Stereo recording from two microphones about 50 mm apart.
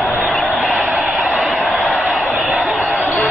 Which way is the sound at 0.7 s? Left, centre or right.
Centre.